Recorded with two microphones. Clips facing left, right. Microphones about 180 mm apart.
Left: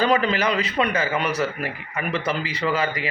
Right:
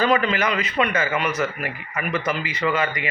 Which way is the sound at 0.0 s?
35° left (ahead or behind).